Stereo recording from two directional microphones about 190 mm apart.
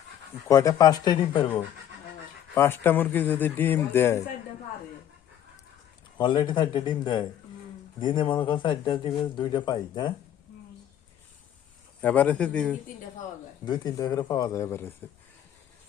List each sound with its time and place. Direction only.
0.4 s speech: 15° left (ahead or behind)
2.6 s speech: 10° left (ahead or behind)
6.1 s speech: 25° left (ahead or behind)
12.0 s speech: 10° left (ahead or behind)
13.7 s speech: 20° left (ahead or behind)